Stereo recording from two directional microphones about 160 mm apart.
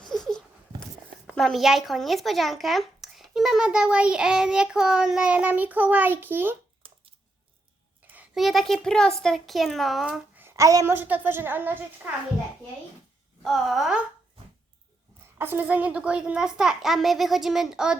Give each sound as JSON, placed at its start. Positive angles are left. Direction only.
{"t": 0.0, "sound": "a sound", "side_deg": 5}
{"t": 1.3, "sound": "a child's voice", "side_deg": 0}
{"t": 6.8, "sound": "a sound", "side_deg": -30}
{"t": 8.1, "sound": "a child's voice", "side_deg": -5}
{"t": 13.4, "sound": "a child's voice", "side_deg": 0}
{"t": 15.4, "sound": "a child's voice", "side_deg": -15}